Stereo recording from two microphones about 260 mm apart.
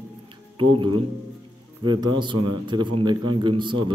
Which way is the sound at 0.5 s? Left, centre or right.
Centre.